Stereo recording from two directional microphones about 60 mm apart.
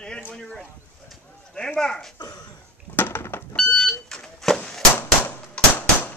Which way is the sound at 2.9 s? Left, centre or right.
Left.